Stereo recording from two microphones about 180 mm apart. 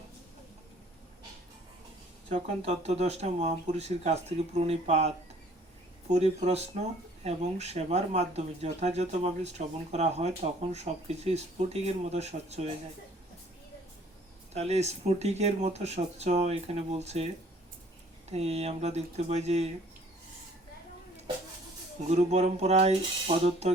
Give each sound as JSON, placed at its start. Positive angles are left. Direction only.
{"t": 2.3, "sound": "speech", "side_deg": -35}
{"t": 14.5, "sound": "speech", "side_deg": -35}
{"t": 18.3, "sound": "speech", "side_deg": -35}
{"t": 22.1, "sound": "speech", "side_deg": -40}